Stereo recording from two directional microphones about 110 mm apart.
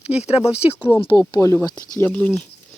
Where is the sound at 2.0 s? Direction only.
15° left (ahead or behind).